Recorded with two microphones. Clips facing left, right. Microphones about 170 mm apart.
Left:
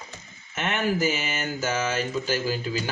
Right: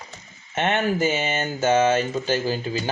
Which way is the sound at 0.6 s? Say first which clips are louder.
Right 4 dB; 30° right (ahead or behind).